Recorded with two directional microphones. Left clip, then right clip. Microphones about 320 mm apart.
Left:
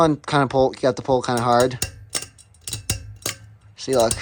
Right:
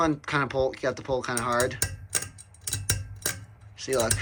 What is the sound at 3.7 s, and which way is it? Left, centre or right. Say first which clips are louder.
Typing: left 8 dB; centre.